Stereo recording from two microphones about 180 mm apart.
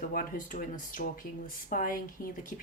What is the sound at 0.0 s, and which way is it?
Speech, 50° left (ahead or behind).